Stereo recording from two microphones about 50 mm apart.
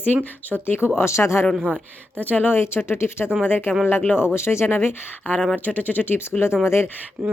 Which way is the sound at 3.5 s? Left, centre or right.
Left.